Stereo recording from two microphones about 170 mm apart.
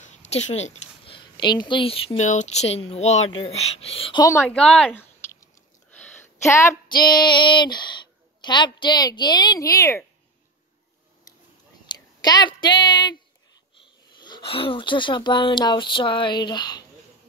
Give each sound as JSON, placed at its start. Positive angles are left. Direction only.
{"t": 0.0, "sound": "a woman's voice", "side_deg": 40}
{"t": 4.2, "sound": "a woman's voice", "side_deg": 15}
{"t": 4.6, "sound": "speech", "side_deg": 5}
{"t": 5.2, "sound": "a sound", "side_deg": 15}
{"t": 11.8, "sound": "speech", "side_deg": 25}